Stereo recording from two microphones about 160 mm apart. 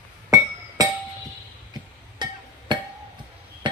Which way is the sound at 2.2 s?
30° right (ahead or behind).